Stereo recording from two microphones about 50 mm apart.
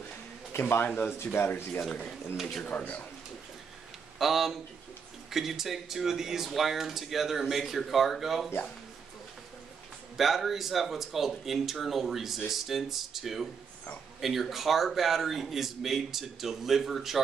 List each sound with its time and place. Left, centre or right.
0.5 s speech: left
0.8 s speech: left
1.2 s speech: left
1.8 s speech: centre
2.6 s speech: left
4.2 s speech: centre
10.1 s speech: centre